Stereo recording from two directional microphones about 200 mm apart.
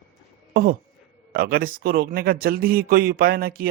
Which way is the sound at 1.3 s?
45° right (ahead or behind).